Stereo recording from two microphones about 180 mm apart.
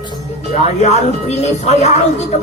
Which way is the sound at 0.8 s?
40° left (ahead or behind).